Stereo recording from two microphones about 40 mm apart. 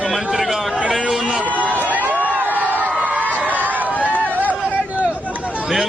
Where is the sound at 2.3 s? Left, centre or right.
Right.